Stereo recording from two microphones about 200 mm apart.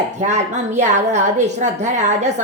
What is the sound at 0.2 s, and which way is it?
A woman's voice, 35° right (ahead or behind).